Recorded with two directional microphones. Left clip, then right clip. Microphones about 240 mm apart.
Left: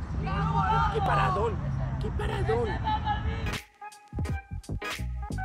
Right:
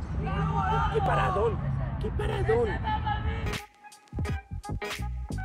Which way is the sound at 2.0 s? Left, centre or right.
Centre.